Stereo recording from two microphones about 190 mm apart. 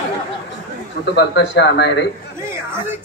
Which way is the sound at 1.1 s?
65° left (ahead or behind).